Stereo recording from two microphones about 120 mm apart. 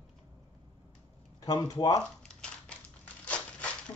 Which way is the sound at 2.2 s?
5° left (ahead or behind).